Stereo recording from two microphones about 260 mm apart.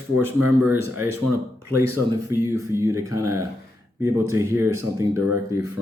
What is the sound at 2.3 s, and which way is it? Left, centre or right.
Speech, centre.